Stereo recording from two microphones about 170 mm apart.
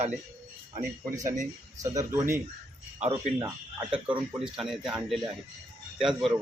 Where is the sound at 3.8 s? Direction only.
5° right (ahead or behind).